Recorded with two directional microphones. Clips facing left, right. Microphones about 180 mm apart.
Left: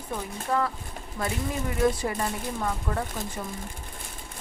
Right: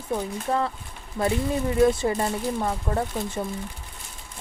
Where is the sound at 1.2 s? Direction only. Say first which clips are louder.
Right 6 dB; 30° right (ahead or behind).